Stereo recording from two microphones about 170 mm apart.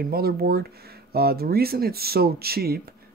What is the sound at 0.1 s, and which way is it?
Speech, 65° right (ahead or behind).